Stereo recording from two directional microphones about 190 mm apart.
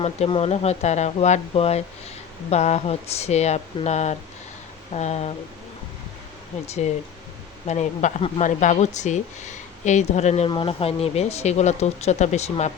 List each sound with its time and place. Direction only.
0.0 s speech: 30° left (ahead or behind)
7.7 s speech: 40° left (ahead or behind)